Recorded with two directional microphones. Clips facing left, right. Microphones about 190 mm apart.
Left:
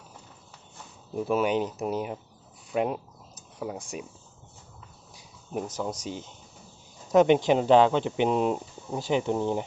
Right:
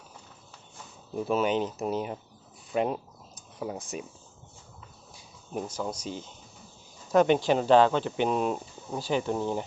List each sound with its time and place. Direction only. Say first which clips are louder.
1.1 s speech: left 1 dB; 10° left (ahead or behind)
5.5 s speech: left 1 dB; 20° left (ahead or behind)